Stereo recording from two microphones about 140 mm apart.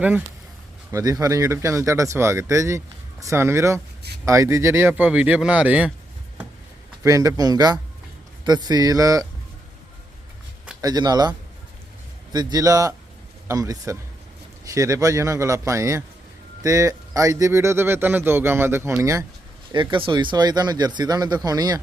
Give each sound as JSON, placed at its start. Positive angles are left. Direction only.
{"t": 0.9, "sound": "speech", "side_deg": -25}
{"t": 7.0, "sound": "speech", "side_deg": -25}
{"t": 10.8, "sound": "speech", "side_deg": -25}
{"t": 19.7, "sound": "speech", "side_deg": -35}